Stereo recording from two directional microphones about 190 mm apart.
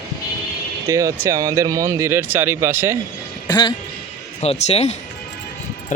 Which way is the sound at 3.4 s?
20° left (ahead or behind).